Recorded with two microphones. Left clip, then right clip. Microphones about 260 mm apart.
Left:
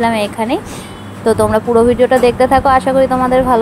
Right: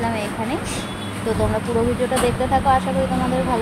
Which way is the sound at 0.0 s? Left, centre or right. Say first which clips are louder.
Left 9 dB; left.